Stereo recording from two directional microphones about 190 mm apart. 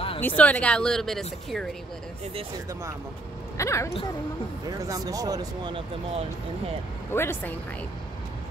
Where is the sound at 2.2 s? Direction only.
30° right (ahead or behind).